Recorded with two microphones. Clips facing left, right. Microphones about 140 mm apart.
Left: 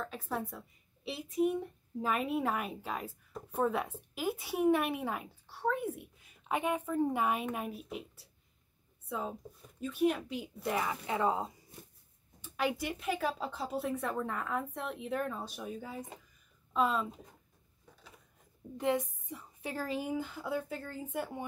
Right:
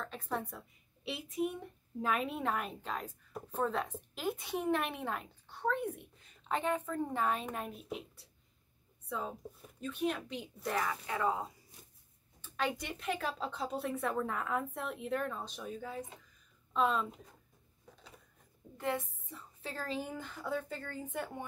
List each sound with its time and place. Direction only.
0.0 s a woman's voice: 5° left (ahead or behind)
9.8 s a woman's voice: 5° left (ahead or behind)
10.6 s speech: 15° left (ahead or behind)
12.4 s a woman's voice: 10° left (ahead or behind)
18.8 s a woman's voice: 15° left (ahead or behind)